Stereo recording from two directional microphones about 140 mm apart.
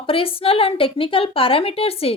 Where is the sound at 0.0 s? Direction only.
40° left (ahead or behind).